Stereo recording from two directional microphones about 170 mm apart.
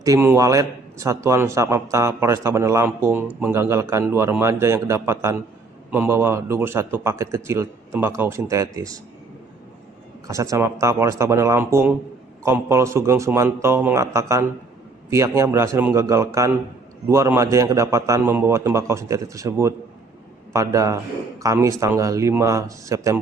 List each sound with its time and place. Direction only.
0.0 s a man's voice: 15° right (ahead or behind)
10.2 s a man's voice: 20° right (ahead or behind)